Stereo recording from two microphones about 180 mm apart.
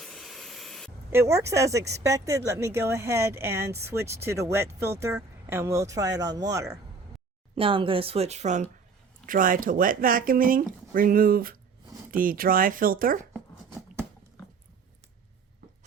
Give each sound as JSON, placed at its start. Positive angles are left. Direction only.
{"t": 0.0, "sound": "a sound", "side_deg": 0}
{"t": 1.1, "sound": "speech", "side_deg": -15}
{"t": 7.5, "sound": "speech", "side_deg": -30}